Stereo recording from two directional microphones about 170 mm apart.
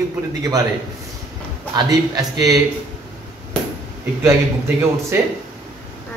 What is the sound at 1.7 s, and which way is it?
Speech, 20° right (ahead or behind).